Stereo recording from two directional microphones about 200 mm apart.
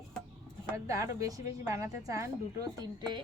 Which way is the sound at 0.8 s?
15° right (ahead or behind).